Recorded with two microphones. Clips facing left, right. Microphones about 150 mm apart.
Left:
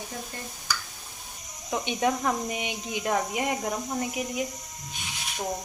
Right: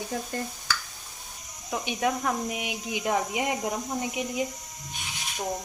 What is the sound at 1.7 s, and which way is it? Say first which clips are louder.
Speech: left 1 dB; 5° right (ahead or behind).